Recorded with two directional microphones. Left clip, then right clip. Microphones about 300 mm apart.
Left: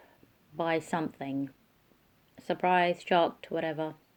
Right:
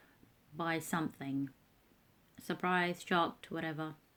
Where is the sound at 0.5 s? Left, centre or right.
Right.